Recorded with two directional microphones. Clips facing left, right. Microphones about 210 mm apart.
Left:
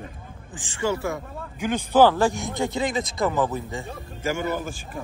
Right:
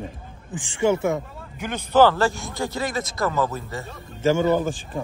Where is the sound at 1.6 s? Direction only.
10° left (ahead or behind).